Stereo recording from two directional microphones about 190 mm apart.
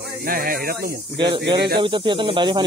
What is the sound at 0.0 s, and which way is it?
Speech, 50° right (ahead or behind).